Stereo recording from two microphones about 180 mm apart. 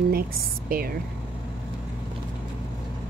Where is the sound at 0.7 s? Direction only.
55° right (ahead or behind).